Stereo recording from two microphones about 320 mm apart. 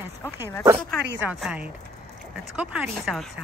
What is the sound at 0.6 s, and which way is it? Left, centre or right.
Speech, centre.